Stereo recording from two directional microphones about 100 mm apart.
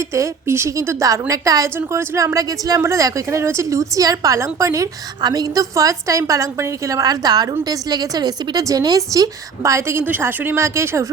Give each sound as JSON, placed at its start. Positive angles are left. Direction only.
{"t": 0.0, "sound": "speech", "side_deg": -30}